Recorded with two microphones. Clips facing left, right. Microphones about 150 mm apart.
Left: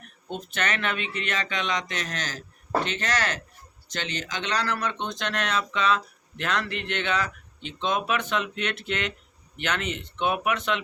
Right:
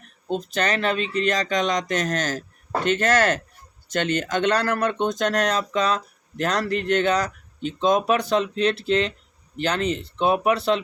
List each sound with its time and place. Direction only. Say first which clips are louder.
0.3 s speech: right 6 dB; 35° right (ahead or behind)